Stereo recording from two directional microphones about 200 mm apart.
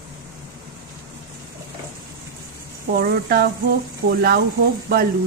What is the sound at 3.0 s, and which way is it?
A woman's voice, 50° right (ahead or behind).